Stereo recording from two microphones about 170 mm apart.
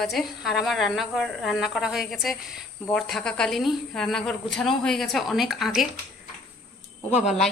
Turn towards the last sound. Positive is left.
turn(degrees=-5)  # may be behind; listen again after turning